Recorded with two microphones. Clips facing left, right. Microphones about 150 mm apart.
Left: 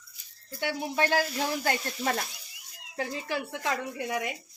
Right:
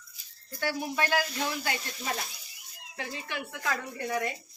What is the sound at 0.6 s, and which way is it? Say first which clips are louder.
Speech: left 2 dB; 20° left (ahead or behind).